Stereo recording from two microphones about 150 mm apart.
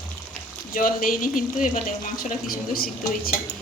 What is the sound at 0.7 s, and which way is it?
Speech, 70° left (ahead or behind).